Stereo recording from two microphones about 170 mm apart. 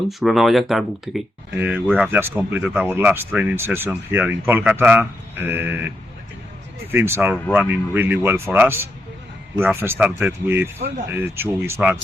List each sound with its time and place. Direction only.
0.1 s speech: centre (ahead or behind)
6.9 s speech: 15° right (ahead or behind)